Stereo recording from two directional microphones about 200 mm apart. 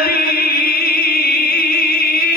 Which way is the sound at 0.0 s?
50° left (ahead or behind).